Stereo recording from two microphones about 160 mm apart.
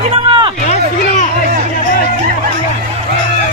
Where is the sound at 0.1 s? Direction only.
30° right (ahead or behind).